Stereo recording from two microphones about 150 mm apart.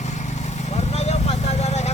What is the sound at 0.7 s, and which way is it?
Vehicle, 45° left (ahead or behind).